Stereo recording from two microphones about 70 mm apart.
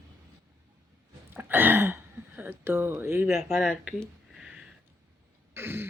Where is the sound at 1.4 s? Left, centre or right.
Right.